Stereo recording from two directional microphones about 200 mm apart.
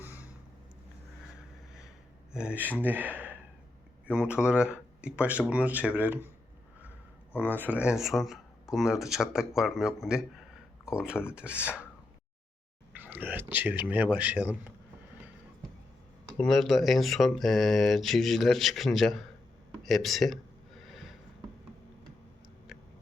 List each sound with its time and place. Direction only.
2.3 s speech: 5° right (ahead or behind)
7.3 s speech: 10° left (ahead or behind)
7.6 s speech: 5° right (ahead or behind)
13.0 s speech: 10° right (ahead or behind)
16.4 s speech: centre (ahead or behind)
19.8 s a sound: centre (ahead or behind)